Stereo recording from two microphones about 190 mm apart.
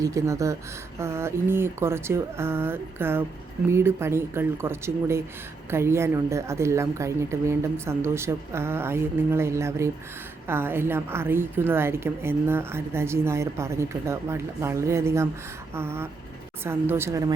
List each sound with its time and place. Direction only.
0.0 s a woman's voice: 15° right (ahead or behind)